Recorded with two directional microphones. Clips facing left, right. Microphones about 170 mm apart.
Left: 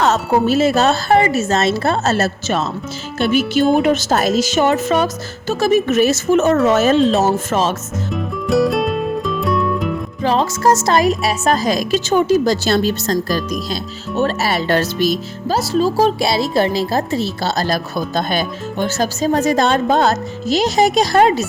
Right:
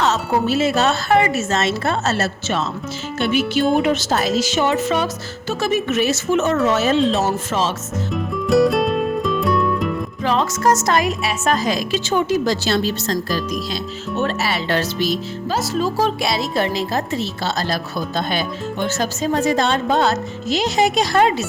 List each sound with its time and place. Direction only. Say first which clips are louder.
0.0 s speech: left 4 dB; 45° left (ahead or behind)
8.1 s music: even; centre (ahead or behind)
10.2 s speech: left 3 dB; 30° left (ahead or behind)